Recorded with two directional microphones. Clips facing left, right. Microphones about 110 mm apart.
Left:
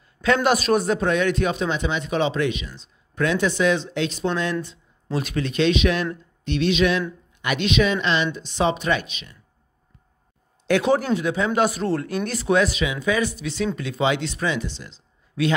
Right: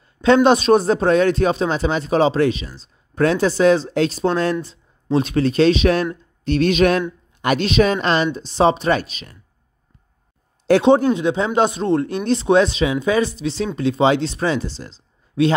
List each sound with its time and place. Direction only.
0.2 s speech: 25° right (ahead or behind)
10.7 s speech: 25° right (ahead or behind)